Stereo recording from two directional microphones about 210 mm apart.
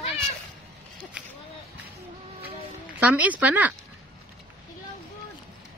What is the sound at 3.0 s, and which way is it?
Speech, 5° right (ahead or behind).